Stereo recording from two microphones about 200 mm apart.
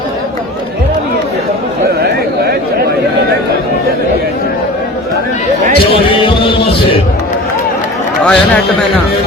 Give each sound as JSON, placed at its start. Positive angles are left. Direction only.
{"t": 2.0, "sound": "a sound", "side_deg": -50}
{"t": 5.9, "sound": "music", "side_deg": 25}
{"t": 8.2, "sound": "a man's voice", "side_deg": 5}